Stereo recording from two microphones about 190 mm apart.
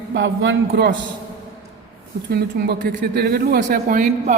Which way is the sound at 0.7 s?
60° right (ahead or behind).